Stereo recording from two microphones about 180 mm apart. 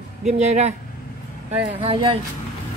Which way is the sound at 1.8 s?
30° right (ahead or behind).